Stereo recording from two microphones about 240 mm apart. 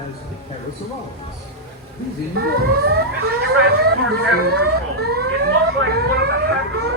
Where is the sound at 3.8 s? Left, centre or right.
Right.